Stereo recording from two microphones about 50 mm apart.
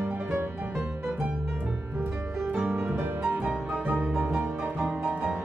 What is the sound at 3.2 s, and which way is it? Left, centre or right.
Music, right.